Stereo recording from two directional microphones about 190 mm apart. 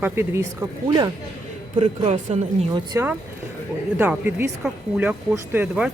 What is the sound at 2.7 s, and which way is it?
Speech, 15° right (ahead or behind).